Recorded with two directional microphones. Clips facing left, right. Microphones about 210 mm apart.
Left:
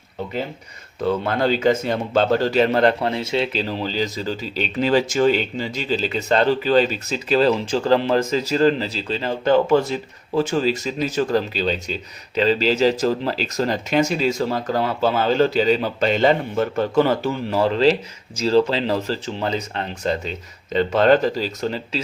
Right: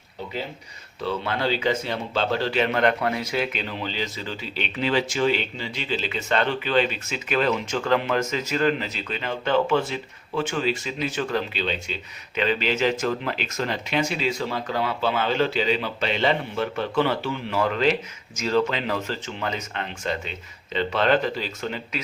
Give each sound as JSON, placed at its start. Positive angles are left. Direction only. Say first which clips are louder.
{"t": 1.0, "sound": "speech", "louder": "left 6 dB", "side_deg": 45}